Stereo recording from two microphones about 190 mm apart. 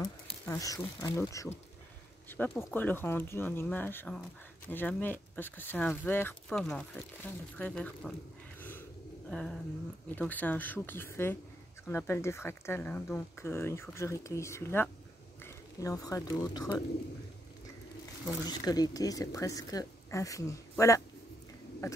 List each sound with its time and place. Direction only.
0.5 s speech: 15° left (ahead or behind)
8.5 s a sound: 10° left (ahead or behind)
9.3 s bird: centre (ahead or behind)
10.1 s speech: 10° left (ahead or behind)
18.2 s speech: 20° left (ahead or behind)